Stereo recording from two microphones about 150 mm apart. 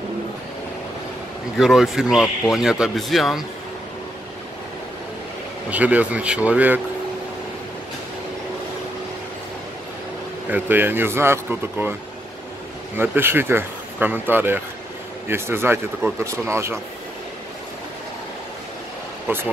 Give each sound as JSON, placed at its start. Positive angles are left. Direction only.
{"t": 1.6, "sound": "speech", "side_deg": -5}
{"t": 5.7, "sound": "speech", "side_deg": -10}
{"t": 10.5, "sound": "speech", "side_deg": -15}
{"t": 12.9, "sound": "speech", "side_deg": -15}